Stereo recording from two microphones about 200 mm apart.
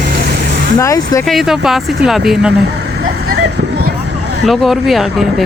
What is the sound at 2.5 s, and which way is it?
Vehicle, 55° right (ahead or behind).